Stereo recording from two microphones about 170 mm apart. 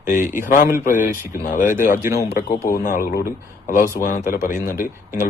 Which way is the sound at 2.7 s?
55° left (ahead or behind).